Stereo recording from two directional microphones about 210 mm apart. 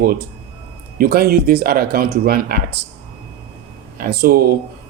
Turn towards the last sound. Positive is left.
turn(degrees=-45)  # may be behind; listen again after turning